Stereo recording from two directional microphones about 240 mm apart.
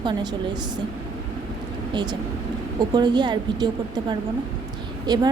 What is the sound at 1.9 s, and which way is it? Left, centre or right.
A woman's voice, centre.